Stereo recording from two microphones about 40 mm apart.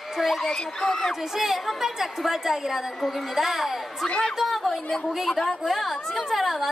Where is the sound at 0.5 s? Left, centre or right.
Centre.